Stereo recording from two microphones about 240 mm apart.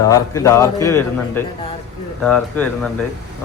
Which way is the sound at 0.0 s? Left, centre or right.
Centre.